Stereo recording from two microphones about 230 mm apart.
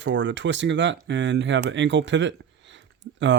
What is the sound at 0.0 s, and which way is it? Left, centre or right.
Speech, right.